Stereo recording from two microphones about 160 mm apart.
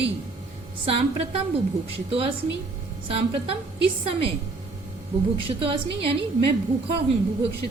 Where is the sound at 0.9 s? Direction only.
35° right (ahead or behind).